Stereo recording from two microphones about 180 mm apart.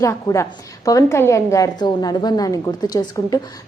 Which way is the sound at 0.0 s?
15° left (ahead or behind).